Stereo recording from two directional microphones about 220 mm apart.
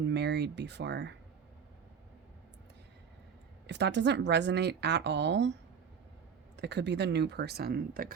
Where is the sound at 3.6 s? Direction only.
50° right (ahead or behind).